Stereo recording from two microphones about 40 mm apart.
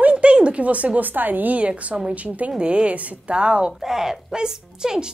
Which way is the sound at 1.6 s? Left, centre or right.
Right.